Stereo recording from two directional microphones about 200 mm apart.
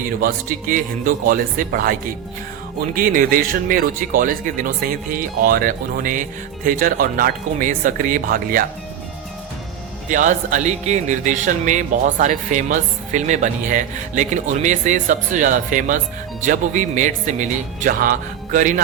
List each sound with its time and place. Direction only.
0.2 s speech: 45° right (ahead or behind)
10.1 s speech: 40° right (ahead or behind)